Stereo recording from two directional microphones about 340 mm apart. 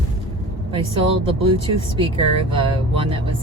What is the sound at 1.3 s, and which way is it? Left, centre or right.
Speech, centre.